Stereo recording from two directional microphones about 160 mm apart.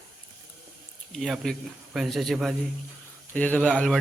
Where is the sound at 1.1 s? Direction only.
Centre (ahead or behind).